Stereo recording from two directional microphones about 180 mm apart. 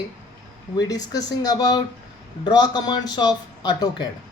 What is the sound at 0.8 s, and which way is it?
Speech, 20° left (ahead or behind).